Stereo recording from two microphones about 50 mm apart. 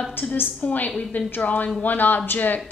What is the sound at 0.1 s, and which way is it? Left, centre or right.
A woman's voice, left.